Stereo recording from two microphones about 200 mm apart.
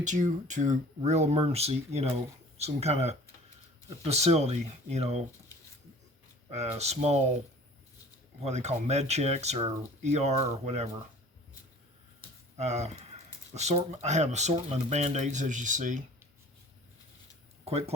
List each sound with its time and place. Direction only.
0.0 s speech: 40° right (ahead or behind)
6.5 s speech: 30° right (ahead or behind)
8.4 s speech: 35° right (ahead or behind)
12.5 s speech: 35° right (ahead or behind)
17.7 s speech: 30° right (ahead or behind)